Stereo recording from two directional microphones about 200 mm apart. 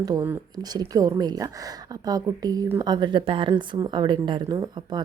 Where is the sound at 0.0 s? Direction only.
20° right (ahead or behind).